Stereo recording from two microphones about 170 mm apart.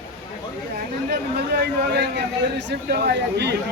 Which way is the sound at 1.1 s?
70° right (ahead or behind).